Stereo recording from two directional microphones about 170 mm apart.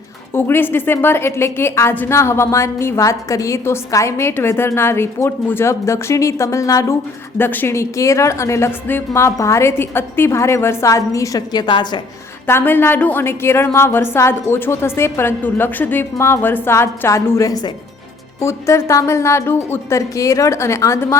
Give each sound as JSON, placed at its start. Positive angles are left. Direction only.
{"t": 0.3, "sound": "a woman's voice", "side_deg": 10}
{"t": 12.5, "sound": "a woman's voice", "side_deg": 15}